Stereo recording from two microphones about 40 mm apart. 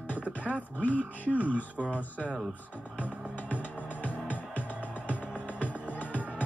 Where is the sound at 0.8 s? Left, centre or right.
Left.